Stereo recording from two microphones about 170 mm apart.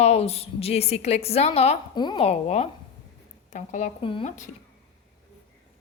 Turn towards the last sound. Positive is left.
turn(degrees=30)  # may be behind; listen again after turning